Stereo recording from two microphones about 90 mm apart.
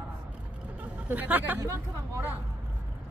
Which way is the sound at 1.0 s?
20° right (ahead or behind).